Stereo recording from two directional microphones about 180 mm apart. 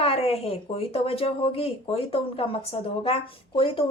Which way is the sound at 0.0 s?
35° left (ahead or behind).